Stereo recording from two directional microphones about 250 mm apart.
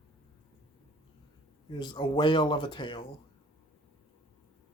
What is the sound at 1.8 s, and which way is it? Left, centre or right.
Speech, centre.